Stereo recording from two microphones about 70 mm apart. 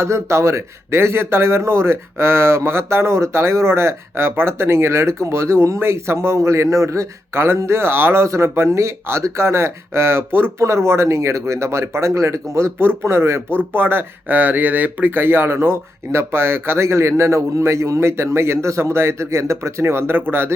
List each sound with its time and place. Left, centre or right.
0.0 s speech: right